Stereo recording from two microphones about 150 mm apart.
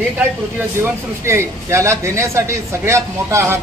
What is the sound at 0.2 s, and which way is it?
Speech, 15° right (ahead or behind).